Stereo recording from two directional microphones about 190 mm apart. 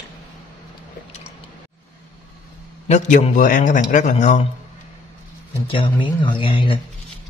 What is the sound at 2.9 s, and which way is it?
A man's voice, 40° left (ahead or behind).